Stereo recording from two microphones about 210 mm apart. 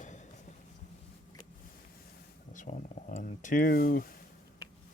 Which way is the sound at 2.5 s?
35° left (ahead or behind).